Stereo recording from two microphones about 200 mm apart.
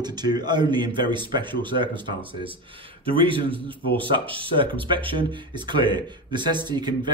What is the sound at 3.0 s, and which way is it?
Speech, 25° right (ahead or behind).